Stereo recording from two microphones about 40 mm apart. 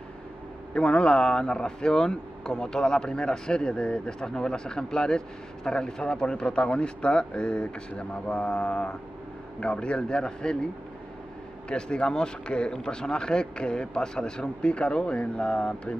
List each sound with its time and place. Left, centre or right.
0.7 s speech: left
11.7 s speech: left